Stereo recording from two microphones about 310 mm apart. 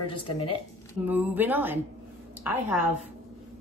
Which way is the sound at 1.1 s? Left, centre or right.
Centre.